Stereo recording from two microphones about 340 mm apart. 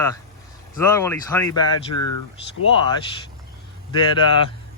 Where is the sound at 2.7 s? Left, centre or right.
Centre.